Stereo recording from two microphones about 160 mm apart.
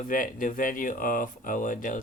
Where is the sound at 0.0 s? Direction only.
55° left (ahead or behind).